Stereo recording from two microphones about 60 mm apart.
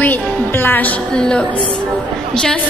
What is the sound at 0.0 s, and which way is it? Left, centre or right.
Music, left.